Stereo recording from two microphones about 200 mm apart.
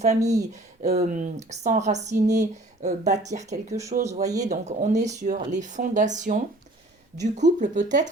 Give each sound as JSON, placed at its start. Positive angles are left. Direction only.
{"t": 0.0, "sound": "speech", "side_deg": -35}
{"t": 0.8, "sound": "speech", "side_deg": -45}